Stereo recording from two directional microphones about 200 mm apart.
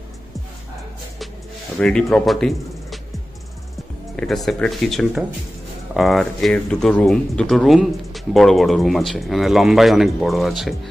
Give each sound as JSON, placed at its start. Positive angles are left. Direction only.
{"t": 1.8, "sound": "speech", "side_deg": 5}
{"t": 4.2, "sound": "speech", "side_deg": 0}